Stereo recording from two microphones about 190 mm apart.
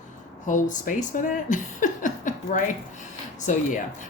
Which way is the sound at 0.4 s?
40° left (ahead or behind).